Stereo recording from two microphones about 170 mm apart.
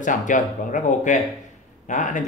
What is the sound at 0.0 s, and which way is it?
Speech, 50° left (ahead or behind).